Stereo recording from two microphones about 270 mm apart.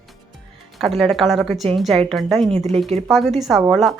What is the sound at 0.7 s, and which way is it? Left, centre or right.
Speech, centre.